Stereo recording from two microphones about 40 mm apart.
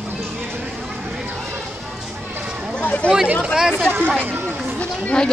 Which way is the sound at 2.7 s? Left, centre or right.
Left.